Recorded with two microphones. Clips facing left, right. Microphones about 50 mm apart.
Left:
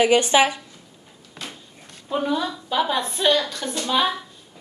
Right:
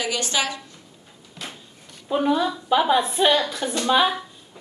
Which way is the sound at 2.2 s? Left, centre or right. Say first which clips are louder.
Right 4 dB; centre.